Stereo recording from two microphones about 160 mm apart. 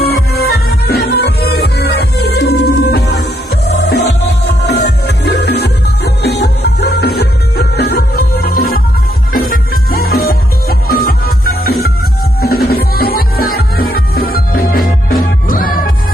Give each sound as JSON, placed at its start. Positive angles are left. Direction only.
{"t": 0.0, "sound": "music", "side_deg": 80}